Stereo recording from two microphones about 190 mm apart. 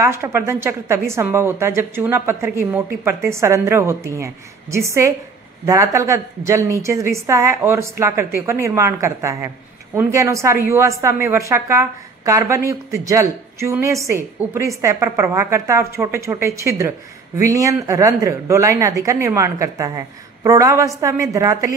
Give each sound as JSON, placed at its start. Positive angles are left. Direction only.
{"t": 0.0, "sound": "a woman's voice", "side_deg": -15}